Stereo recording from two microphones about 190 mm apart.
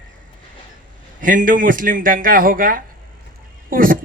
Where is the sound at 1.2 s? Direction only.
45° right (ahead or behind).